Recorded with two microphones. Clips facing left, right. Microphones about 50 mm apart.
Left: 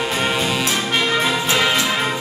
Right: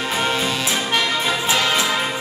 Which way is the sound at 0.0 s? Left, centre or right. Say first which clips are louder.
Left 1 dB; centre.